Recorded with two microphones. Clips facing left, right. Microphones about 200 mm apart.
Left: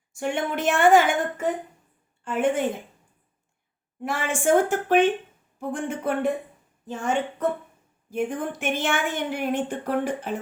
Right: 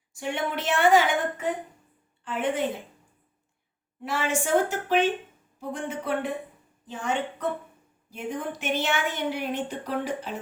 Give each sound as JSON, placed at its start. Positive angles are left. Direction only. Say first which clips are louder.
{"t": 0.1, "sound": "a woman's voice", "louder": "left 3 dB", "side_deg": 50}
{"t": 4.0, "sound": "a woman's voice", "louder": "left 3 dB", "side_deg": 50}